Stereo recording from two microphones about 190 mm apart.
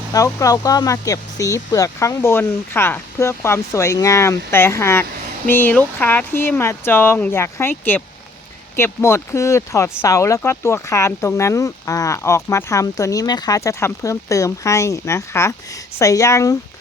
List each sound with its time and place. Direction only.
0.1 s speech: 15° left (ahead or behind)